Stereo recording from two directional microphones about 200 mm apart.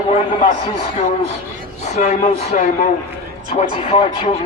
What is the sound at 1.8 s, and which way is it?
Speech, 35° left (ahead or behind).